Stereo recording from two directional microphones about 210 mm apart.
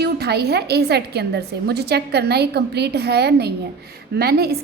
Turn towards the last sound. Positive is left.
turn(degrees=-50)  # may be behind; listen again after turning